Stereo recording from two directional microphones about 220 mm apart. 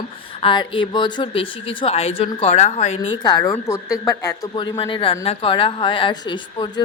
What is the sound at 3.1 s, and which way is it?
A woman's voice, 20° left (ahead or behind).